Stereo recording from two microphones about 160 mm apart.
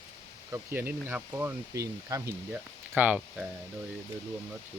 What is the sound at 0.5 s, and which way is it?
Speech, 15° right (ahead or behind).